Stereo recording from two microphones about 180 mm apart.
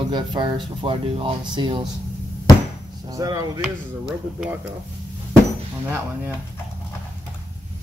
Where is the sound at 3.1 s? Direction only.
20° right (ahead or behind).